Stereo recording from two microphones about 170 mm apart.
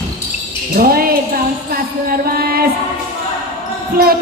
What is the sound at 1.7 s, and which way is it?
Music, 60° right (ahead or behind).